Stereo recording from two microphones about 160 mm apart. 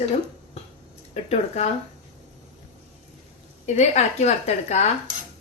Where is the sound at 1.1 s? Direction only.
40° left (ahead or behind).